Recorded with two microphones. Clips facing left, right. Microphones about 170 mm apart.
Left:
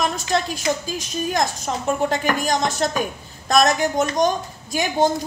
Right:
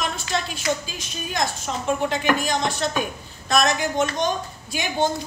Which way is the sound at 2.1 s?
45° left (ahead or behind).